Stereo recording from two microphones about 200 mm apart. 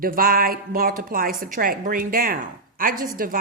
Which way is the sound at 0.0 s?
45° right (ahead or behind).